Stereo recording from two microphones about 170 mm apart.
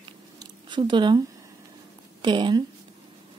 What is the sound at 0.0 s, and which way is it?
Chewing, 25° right (ahead or behind).